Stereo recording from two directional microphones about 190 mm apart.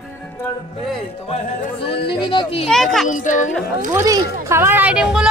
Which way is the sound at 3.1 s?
40° left (ahead or behind).